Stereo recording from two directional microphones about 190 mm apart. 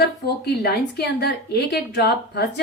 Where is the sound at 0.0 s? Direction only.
60° left (ahead or behind).